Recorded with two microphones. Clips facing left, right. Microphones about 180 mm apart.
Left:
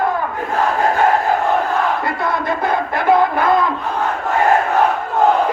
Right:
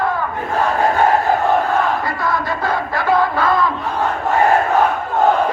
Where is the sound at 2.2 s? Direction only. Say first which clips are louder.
Left 1 dB; 20° left (ahead or behind).